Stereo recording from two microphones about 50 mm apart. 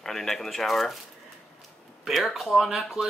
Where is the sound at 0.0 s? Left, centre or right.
Centre.